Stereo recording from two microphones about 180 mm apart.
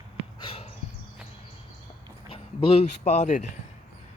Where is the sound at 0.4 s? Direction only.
35° left (ahead or behind).